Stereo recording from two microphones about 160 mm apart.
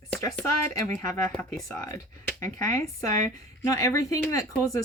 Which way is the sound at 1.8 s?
20° left (ahead or behind).